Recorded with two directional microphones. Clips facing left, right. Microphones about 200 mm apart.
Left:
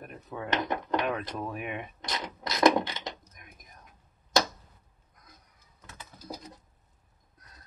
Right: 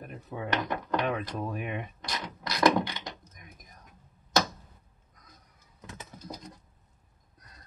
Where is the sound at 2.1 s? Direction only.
25° left (ahead or behind).